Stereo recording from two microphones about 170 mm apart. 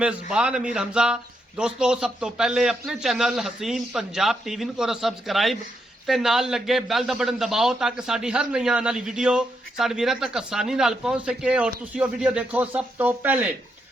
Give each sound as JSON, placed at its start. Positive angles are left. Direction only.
{"t": 0.0, "sound": "a man's voice", "side_deg": -5}